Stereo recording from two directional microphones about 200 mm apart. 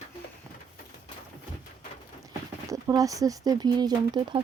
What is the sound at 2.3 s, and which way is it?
Speech, 20° right (ahead or behind).